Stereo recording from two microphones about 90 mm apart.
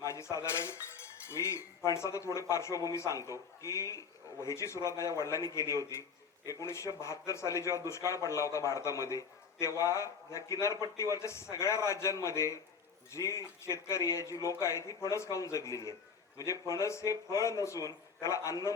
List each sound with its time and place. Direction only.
0.0 s cutlery: 35° left (ahead or behind)
1.3 s speech: 30° left (ahead or behind)